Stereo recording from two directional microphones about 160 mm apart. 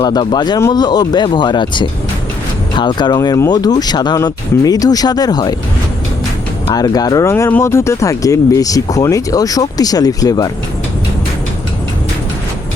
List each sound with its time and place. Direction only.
0.0 s speech: 25° left (ahead or behind)
6.7 s speech: 25° left (ahead or behind)